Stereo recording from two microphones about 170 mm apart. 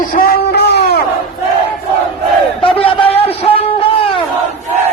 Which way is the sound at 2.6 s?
35° left (ahead or behind).